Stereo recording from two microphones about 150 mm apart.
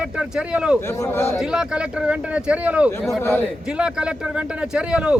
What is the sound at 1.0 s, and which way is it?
Speech, 15° left (ahead or behind).